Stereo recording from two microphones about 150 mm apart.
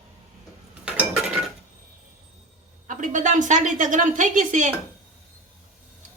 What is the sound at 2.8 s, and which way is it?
A woman's voice, 60° right (ahead or behind).